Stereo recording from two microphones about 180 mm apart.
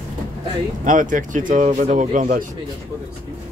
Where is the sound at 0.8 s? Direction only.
45° right (ahead or behind).